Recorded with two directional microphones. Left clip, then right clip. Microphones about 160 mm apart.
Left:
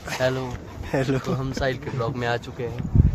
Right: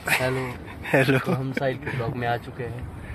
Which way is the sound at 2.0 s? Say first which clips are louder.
Left 2 dB; 20° left (ahead or behind).